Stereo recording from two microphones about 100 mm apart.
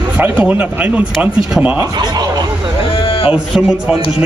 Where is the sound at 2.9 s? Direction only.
60° left (ahead or behind).